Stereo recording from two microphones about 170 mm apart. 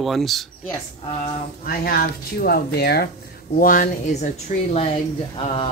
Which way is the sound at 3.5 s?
55° left (ahead or behind).